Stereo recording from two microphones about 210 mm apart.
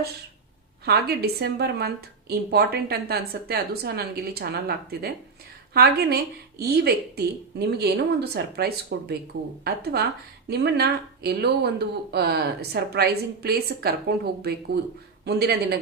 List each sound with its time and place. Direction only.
0.9 s a woman's voice: 50° right (ahead or behind)
15.2 s a woman's voice: 50° right (ahead or behind)